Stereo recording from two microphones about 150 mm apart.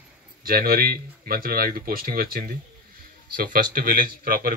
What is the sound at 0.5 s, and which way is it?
A man's voice, 75° right (ahead or behind).